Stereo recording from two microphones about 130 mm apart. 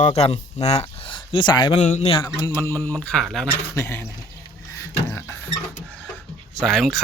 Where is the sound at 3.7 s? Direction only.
15° left (ahead or behind).